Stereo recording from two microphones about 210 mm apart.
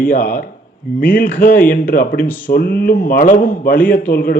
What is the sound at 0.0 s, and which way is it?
A man's voice, 40° left (ahead or behind).